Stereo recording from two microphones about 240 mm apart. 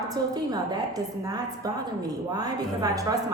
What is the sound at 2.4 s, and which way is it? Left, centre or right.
Speech, centre.